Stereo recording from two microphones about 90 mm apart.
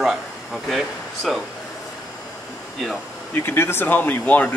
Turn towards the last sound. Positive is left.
turn(degrees=20)  # may be behind; listen again after turning